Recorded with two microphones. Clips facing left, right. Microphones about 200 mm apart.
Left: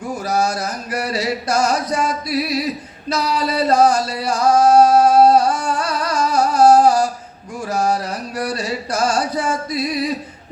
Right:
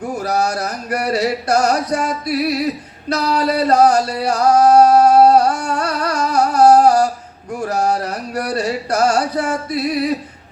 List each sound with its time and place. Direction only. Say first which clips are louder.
0.2 s a sound: right 1 dB; 60° right (ahead or behind)
3.1 s singing: right 3 dB; 60° right (ahead or behind)
7.7 s music: even; 60° right (ahead or behind)